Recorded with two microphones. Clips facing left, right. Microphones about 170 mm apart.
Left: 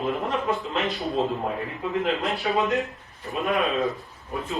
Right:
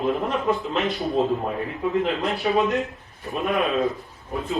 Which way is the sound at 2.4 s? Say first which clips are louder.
Right 3 dB; 20° right (ahead or behind).